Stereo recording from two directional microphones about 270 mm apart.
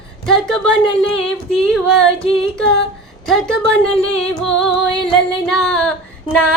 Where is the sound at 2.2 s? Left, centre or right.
Left.